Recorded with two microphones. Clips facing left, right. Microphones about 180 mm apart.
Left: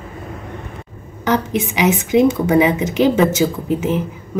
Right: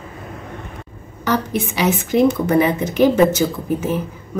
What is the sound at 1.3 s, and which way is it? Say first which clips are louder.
A woman's voice: left 2 dB; 15° left (ahead or behind).